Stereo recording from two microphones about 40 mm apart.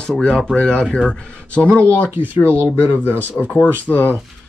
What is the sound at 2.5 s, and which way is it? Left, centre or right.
Speech, right.